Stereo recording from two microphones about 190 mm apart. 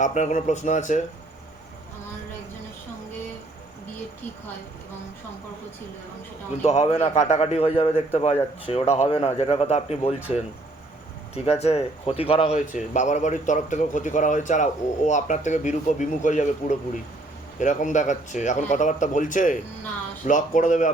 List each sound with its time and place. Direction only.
0.0 s a man's voice: 40° left (ahead or behind)
6.6 s a man's voice: 35° left (ahead or behind)
10.2 s speech: 10° right (ahead or behind)
11.4 s a man's voice: 35° left (ahead or behind)